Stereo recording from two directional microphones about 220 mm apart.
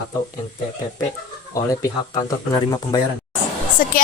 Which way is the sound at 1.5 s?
15° left (ahead or behind).